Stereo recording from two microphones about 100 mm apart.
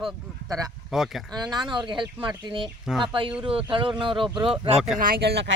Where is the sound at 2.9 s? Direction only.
5° right (ahead or behind).